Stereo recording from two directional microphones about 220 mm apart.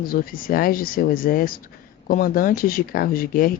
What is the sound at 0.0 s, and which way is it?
Speech, 40° left (ahead or behind).